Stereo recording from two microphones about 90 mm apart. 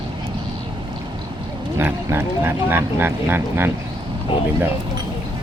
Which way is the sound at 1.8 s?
25° right (ahead or behind).